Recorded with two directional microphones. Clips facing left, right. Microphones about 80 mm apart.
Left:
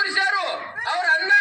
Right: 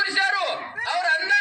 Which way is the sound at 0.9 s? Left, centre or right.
Left.